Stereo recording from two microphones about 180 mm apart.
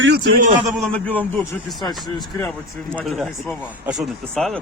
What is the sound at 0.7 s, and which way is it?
Speech, 5° left (ahead or behind).